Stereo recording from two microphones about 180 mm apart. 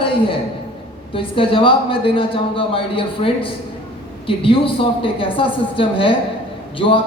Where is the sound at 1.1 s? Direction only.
30° left (ahead or behind).